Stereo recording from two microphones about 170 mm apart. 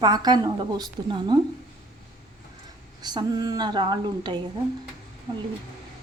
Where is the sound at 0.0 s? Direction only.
25° right (ahead or behind).